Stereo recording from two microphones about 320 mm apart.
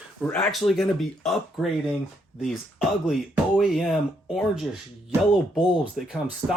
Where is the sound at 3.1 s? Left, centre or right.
Centre.